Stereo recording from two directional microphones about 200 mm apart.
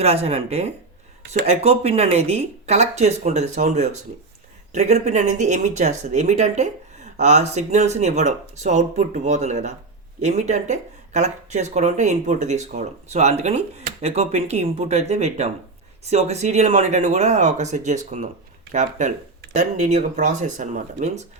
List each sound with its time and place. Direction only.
0.0 s speech: 30° right (ahead or behind)